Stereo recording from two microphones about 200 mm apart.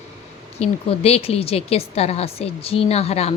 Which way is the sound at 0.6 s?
30° left (ahead or behind).